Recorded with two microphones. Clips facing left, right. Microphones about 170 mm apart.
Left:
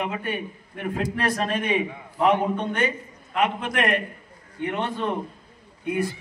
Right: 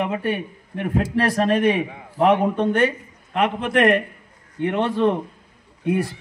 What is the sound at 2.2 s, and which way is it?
Speech, 60° right (ahead or behind).